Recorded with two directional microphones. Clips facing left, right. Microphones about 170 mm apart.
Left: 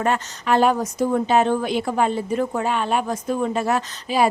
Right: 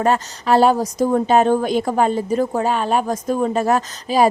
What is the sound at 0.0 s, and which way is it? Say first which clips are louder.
A woman's voice: right 4 dB; 35° right (ahead or behind).